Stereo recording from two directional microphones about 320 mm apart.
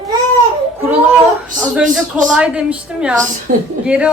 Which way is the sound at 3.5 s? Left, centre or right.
Right.